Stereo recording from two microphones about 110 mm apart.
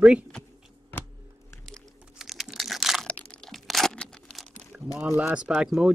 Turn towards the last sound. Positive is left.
turn(degrees=-5)  # may be behind; listen again after turning